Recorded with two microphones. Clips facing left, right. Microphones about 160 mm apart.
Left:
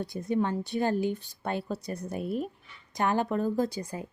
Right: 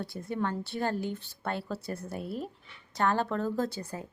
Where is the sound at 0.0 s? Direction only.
20° left (ahead or behind).